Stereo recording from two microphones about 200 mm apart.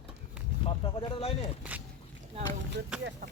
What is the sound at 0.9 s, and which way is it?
Speech, 30° left (ahead or behind).